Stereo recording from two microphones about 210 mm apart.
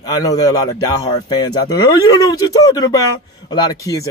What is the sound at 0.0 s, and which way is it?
Speech, 15° left (ahead or behind).